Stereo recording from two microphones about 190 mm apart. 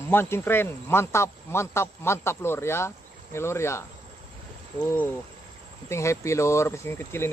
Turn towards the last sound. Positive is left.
turn(degrees=10)  # may be behind; listen again after turning